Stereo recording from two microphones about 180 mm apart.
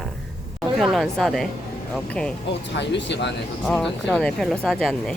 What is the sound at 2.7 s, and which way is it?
Speech, 75° left (ahead or behind).